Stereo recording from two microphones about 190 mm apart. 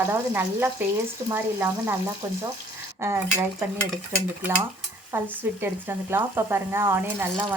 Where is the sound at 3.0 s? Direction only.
10° right (ahead or behind).